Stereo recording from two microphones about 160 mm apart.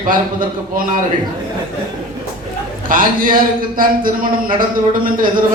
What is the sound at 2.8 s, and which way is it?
A man's voice, 60° right (ahead or behind).